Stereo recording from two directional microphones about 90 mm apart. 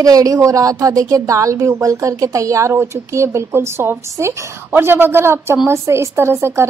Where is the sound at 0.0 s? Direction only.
40° right (ahead or behind).